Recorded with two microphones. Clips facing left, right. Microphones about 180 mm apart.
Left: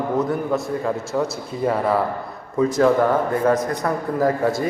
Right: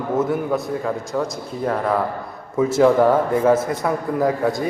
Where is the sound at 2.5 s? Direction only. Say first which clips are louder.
Right 2 dB; 5° right (ahead or behind).